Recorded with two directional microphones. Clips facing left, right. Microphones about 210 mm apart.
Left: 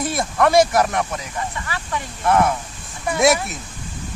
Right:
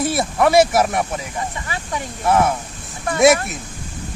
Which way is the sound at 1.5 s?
20° right (ahead or behind).